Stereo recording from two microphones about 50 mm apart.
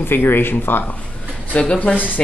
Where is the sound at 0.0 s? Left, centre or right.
Left.